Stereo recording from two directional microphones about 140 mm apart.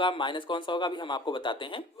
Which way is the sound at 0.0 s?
35° left (ahead or behind).